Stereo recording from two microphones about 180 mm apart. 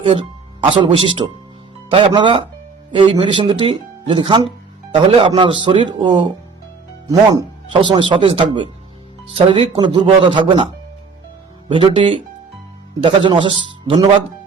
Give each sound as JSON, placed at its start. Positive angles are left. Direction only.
{"t": 0.0, "sound": "speech", "side_deg": -25}
{"t": 11.7, "sound": "speech", "side_deg": -30}